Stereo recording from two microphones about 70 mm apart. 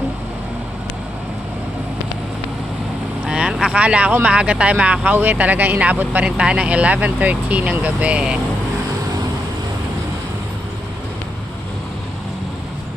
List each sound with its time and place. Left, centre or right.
3.2 s vehicle: centre
4.1 s speech: right